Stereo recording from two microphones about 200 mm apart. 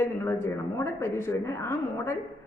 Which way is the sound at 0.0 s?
10° left (ahead or behind).